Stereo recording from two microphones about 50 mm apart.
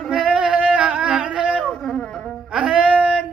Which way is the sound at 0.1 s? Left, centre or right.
Centre.